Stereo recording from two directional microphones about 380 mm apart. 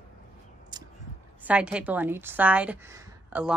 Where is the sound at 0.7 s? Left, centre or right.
Centre.